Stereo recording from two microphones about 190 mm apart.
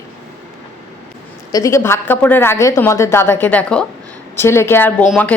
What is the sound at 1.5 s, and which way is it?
A woman's voice, 15° left (ahead or behind).